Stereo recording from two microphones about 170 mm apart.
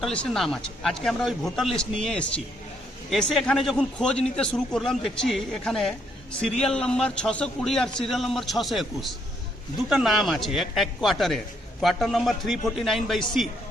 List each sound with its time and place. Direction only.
0.0 s a man's voice: 5° left (ahead or behind)